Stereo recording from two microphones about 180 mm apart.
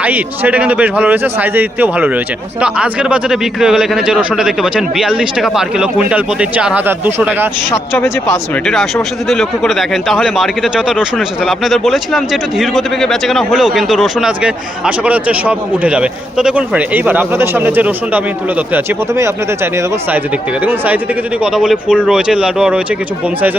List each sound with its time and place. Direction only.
0.0 s a man's voice: 10° right (ahead or behind)
7.7 s speech: 15° left (ahead or behind)
8.6 s a man's voice: centre (ahead or behind)